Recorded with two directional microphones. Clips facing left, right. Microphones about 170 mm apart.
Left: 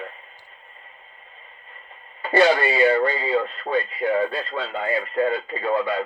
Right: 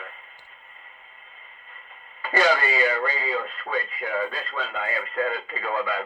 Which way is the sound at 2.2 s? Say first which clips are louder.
Left 5 dB; 30° left (ahead or behind).